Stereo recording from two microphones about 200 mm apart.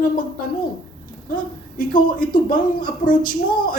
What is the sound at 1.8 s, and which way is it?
A man's voice, 45° left (ahead or behind).